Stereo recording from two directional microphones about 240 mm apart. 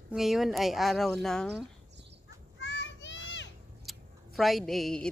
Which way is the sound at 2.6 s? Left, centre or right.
Left.